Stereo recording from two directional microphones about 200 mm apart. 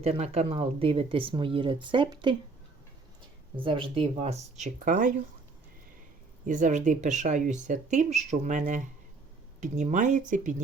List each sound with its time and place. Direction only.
0.0 s speech: 30° right (ahead or behind)
3.6 s speech: 25° right (ahead or behind); by 5.1 s 40° right (ahead or behind)
6.4 s speech: 40° right (ahead or behind)